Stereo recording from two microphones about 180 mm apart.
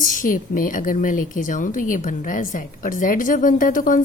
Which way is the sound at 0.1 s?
50° left (ahead or behind).